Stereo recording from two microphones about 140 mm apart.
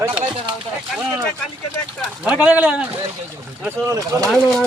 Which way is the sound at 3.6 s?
20° right (ahead or behind).